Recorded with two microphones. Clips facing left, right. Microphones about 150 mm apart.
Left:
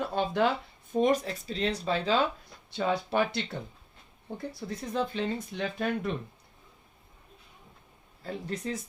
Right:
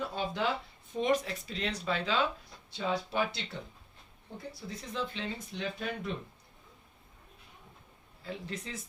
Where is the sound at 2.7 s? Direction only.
60° left (ahead or behind).